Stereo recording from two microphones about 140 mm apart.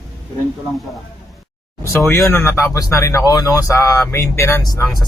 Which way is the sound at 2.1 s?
15° left (ahead or behind).